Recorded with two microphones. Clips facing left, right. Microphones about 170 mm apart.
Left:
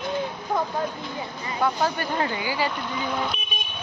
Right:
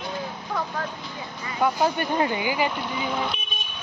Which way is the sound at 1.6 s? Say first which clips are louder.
Right 2 dB; 15° right (ahead or behind).